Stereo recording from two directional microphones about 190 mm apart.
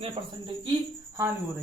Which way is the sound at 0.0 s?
25° right (ahead or behind).